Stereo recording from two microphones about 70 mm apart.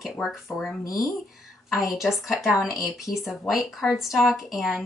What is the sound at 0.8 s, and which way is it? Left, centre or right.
Speech, left.